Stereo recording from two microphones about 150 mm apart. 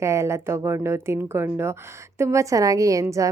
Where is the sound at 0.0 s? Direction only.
20° right (ahead or behind).